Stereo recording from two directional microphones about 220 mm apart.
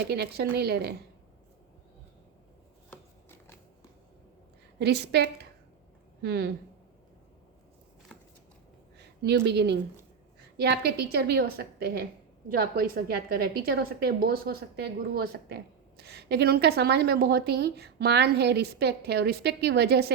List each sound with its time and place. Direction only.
0.0 s a woman's voice: 45° right (ahead or behind)
2.9 s chopping: 10° left (ahead or behind)
4.8 s a woman's voice: 50° right (ahead or behind)
9.0 s a woman's voice: 50° right (ahead or behind)